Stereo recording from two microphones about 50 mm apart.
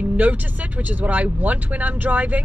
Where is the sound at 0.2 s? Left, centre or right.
Right.